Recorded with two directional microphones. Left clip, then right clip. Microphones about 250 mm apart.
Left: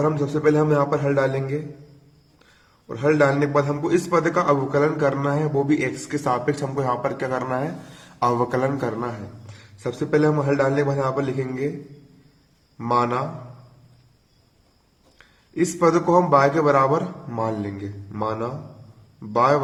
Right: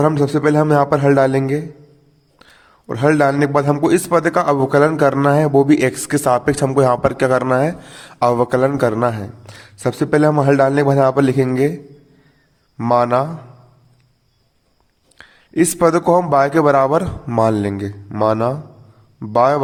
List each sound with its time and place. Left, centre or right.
0.0 s a man's voice: right
12.7 s a man's voice: right
15.2 s a man's voice: right